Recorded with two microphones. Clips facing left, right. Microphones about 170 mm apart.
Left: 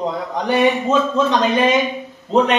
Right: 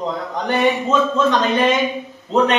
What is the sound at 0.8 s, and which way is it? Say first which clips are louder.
Speech: even; 10° left (ahead or behind).